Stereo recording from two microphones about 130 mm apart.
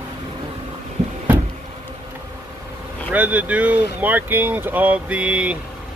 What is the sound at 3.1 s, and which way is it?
Speech, 10° right (ahead or behind).